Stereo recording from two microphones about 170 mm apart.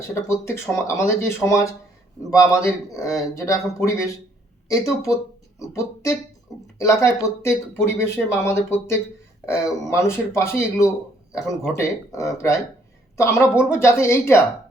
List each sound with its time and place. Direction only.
0.1 s a man's voice: 15° left (ahead or behind)